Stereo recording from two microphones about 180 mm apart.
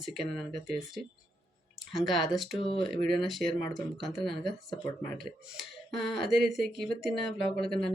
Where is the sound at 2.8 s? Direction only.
Centre (ahead or behind).